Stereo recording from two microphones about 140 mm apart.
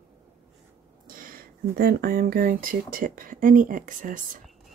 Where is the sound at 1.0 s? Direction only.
80° right.